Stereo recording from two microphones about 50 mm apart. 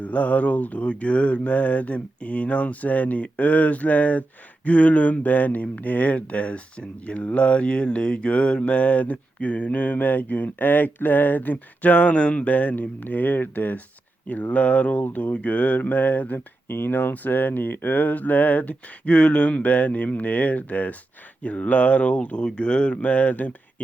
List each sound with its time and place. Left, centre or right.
0.0 s speech: left